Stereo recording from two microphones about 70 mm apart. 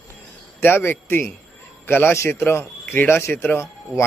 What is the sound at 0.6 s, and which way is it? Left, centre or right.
Speech, left.